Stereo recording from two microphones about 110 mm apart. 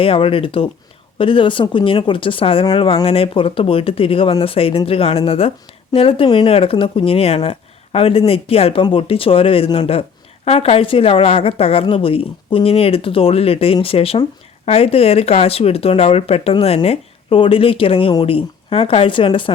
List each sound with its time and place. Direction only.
0.0 s speech: 55° left (ahead or behind)
10.4 s speech: 65° left (ahead or behind)